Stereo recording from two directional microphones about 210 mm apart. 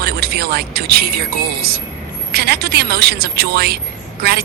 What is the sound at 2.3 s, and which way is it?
Speech, 50° right (ahead or behind).